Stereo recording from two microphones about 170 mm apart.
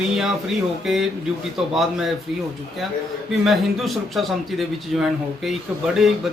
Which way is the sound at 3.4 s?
Centre (ahead or behind).